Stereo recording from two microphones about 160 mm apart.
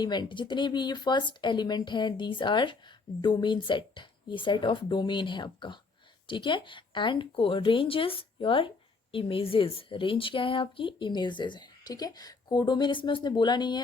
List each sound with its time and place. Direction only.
0.0 s a woman's voice: 25° left (ahead or behind)